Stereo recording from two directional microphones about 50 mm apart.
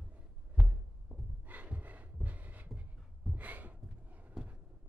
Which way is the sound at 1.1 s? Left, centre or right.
Right.